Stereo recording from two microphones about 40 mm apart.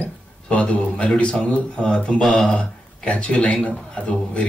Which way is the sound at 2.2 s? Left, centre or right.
Centre.